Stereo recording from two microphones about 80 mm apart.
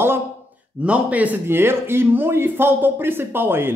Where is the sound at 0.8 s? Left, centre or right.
Centre.